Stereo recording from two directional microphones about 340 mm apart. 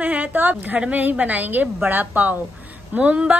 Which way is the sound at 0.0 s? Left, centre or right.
Centre.